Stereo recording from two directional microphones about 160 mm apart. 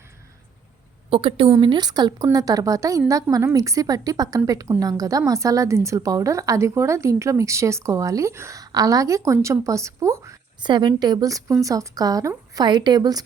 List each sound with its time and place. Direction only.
1.1 s a woman's voice: 35° right (ahead or behind)